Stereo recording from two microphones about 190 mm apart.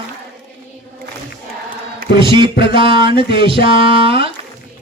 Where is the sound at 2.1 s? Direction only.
25° right (ahead or behind).